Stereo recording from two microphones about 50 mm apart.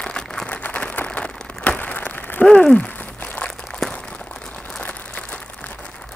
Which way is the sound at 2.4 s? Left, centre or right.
Centre.